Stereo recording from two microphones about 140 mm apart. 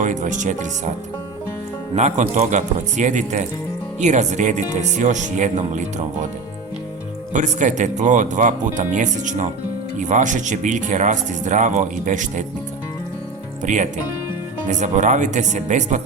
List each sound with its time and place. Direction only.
0.0 s speech: 65° right (ahead or behind)
2.0 s speech: 60° right (ahead or behind)
7.3 s speech: 60° right (ahead or behind)
13.6 s speech: 60° right (ahead or behind)